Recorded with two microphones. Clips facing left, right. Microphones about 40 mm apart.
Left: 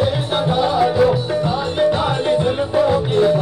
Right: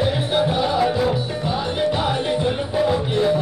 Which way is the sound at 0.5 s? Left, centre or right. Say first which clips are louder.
Left 3 dB; centre.